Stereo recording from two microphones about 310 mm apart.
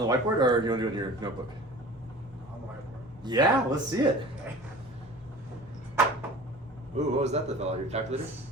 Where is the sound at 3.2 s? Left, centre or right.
Centre.